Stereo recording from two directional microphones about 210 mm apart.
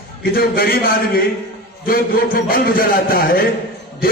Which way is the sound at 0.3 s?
45° left (ahead or behind).